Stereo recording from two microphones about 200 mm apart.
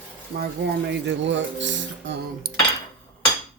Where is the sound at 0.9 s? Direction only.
65° right (ahead or behind).